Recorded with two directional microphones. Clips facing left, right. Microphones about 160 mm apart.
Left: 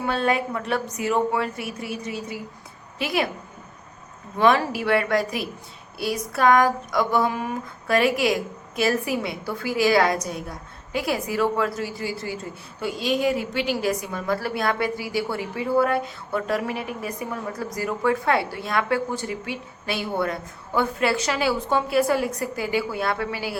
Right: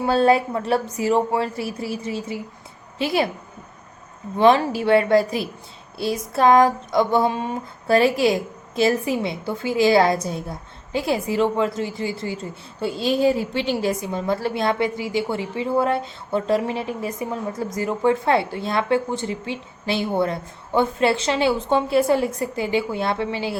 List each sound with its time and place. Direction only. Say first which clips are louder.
0.0 s a woman's voice: right 6 dB; 30° right (ahead or behind)
4.4 s speech: right 4 dB; 25° right (ahead or behind)